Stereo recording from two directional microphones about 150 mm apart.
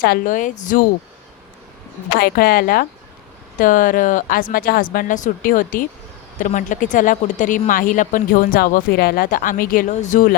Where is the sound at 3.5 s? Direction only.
65° left (ahead or behind).